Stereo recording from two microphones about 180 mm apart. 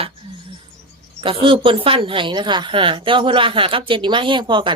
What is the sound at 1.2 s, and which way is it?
A woman's voice, 30° right (ahead or behind).